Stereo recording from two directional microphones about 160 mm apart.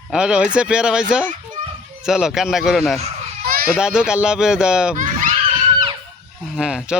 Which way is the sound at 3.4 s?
65° right (ahead or behind).